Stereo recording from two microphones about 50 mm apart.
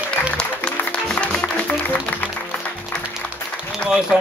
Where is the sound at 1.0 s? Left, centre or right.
Centre.